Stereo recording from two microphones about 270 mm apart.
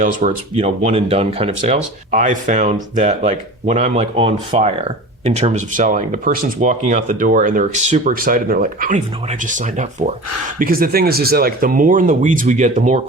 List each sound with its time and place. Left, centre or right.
0.0 s speech: right